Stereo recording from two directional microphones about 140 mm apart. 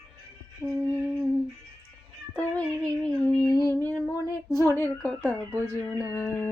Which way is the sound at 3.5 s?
25° left (ahead or behind).